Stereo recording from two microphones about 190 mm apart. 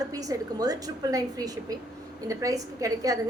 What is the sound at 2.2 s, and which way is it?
Speech, 20° right (ahead or behind).